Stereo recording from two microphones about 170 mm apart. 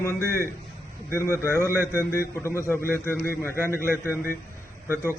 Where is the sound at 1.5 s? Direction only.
15° right (ahead or behind).